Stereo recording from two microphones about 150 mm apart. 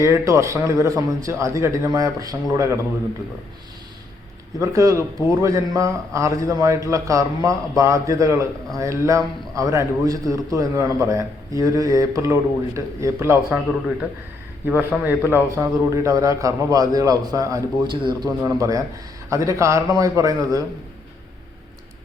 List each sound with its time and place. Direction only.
0.0 s a man's voice: 20° right (ahead or behind)
4.6 s a man's voice: 20° right (ahead or behind)
14.7 s a man's voice: 10° right (ahead or behind)